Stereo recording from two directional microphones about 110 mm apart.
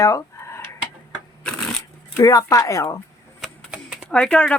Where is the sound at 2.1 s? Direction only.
30° left (ahead or behind).